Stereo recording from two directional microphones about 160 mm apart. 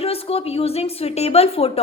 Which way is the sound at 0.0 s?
40° left (ahead or behind).